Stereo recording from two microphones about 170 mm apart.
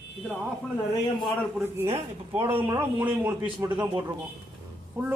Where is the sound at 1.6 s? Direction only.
15° right (ahead or behind).